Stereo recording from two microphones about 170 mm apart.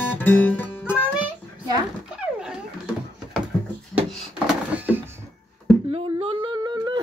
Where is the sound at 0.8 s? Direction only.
5° right (ahead or behind).